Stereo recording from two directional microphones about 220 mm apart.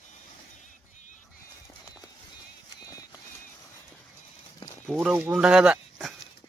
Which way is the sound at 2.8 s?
15° left (ahead or behind).